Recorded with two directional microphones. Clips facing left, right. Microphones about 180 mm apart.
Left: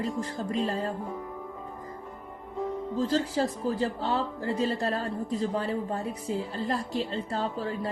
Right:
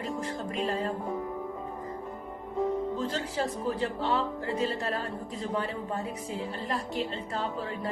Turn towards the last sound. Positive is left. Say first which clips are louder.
# left 2 dB
turn(degrees=35)  # may be behind; listen again after turning